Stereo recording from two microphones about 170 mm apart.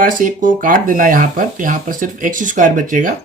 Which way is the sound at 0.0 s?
50° right (ahead or behind).